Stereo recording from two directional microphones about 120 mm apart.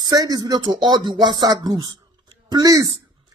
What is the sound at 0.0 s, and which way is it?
Speech, 35° right (ahead or behind).